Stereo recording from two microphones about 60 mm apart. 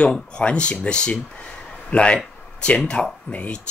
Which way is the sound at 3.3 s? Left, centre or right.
Left.